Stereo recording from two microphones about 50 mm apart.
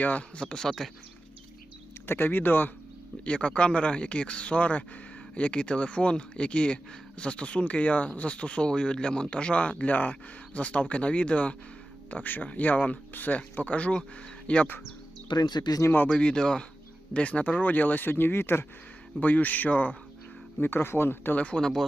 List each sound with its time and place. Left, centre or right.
0.0 s speech: left
0.3 s speech: centre
2.0 s speech: left
3.2 s speech: left
16.1 s speech: centre; by 18.6 s left
19.2 s speech: left
20.6 s speech: left
21.3 s speech: left
21.6 s speech: centre